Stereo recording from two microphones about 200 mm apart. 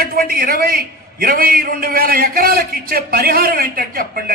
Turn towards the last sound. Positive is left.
turn(degrees=-45)  # may be behind; listen again after turning